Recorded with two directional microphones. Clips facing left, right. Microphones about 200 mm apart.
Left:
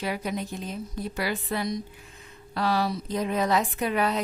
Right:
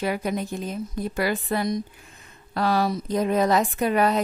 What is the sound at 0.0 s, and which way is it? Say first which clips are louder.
A woman's voice: right 4 dB; 50° right (ahead or behind).